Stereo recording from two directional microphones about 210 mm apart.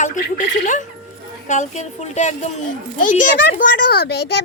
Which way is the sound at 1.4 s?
35° left (ahead or behind).